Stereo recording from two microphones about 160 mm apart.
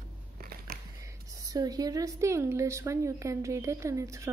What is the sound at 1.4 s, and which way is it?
A woman's voice, 20° right (ahead or behind).